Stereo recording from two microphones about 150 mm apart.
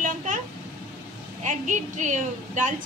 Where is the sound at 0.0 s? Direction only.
55° right (ahead or behind).